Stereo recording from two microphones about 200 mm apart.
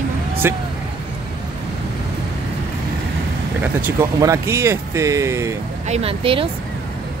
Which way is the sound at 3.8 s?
15° right (ahead or behind).